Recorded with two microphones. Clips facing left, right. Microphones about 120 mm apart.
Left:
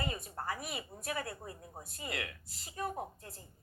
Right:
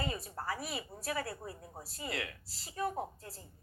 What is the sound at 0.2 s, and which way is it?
A woman's voice, 35° right (ahead or behind).